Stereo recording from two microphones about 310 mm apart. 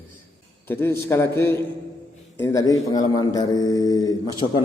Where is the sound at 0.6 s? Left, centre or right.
Centre.